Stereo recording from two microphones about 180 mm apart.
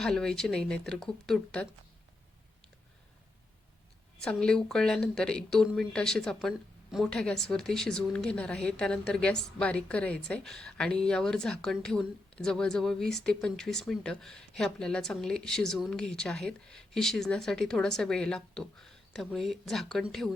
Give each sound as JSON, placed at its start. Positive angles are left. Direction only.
{"t": 0.0, "sound": "speech", "side_deg": 0}
{"t": 4.2, "sound": "speech", "side_deg": 5}